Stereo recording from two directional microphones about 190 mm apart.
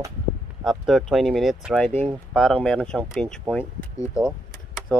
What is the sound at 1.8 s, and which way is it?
Speech, 10° left (ahead or behind).